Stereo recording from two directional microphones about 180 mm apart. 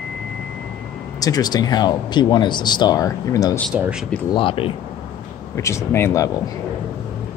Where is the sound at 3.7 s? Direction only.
5° right (ahead or behind).